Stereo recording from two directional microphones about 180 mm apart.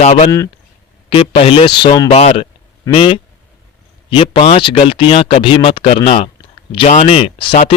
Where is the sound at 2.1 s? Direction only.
35° left (ahead or behind).